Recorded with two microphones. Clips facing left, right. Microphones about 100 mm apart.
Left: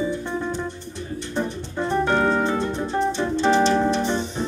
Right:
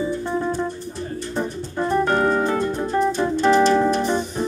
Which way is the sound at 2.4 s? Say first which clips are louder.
Right 2 dB; 25° left (ahead or behind).